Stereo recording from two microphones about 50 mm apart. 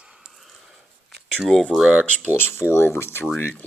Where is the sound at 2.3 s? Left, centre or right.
Left.